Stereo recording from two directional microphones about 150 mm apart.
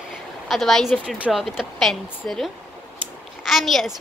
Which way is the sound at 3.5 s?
Centre (ahead or behind).